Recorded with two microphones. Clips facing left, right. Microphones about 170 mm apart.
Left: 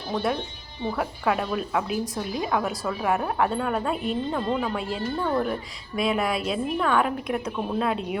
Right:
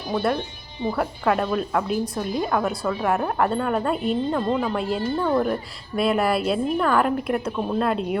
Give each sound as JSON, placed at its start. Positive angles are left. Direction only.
{"t": 0.9, "sound": "a woman's voice", "side_deg": 0}